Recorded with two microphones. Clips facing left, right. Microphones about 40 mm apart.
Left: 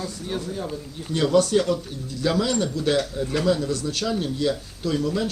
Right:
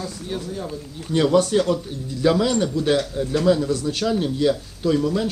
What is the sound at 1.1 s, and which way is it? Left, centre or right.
Speech, centre.